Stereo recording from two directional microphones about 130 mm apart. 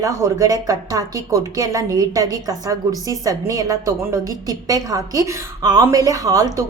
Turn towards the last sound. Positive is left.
turn(degrees=-25)  # may be behind; listen again after turning